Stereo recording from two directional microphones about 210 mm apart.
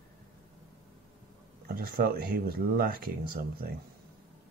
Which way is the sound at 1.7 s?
45° right (ahead or behind).